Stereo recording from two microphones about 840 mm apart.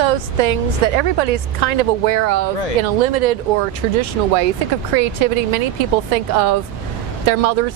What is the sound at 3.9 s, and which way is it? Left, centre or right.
Speech, right.